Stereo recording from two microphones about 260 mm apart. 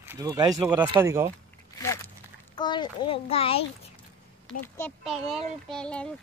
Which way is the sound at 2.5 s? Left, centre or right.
Centre.